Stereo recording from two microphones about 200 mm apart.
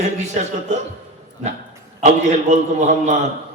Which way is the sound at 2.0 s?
35° right (ahead or behind).